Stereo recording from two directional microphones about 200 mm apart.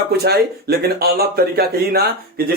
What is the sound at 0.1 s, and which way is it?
Speech, 55° right (ahead or behind).